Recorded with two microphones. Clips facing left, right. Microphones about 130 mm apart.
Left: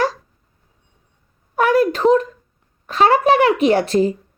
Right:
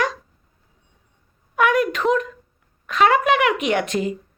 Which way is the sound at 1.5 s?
35° left (ahead or behind).